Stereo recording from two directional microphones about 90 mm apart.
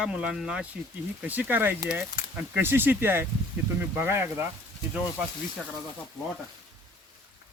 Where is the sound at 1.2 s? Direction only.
15° right (ahead or behind).